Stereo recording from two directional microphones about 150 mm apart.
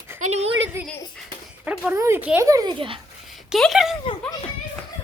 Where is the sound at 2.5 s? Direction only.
25° right (ahead or behind).